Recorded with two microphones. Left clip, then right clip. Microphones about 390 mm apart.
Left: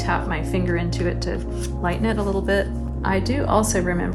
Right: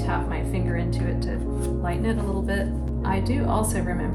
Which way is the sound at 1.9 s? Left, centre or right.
Centre.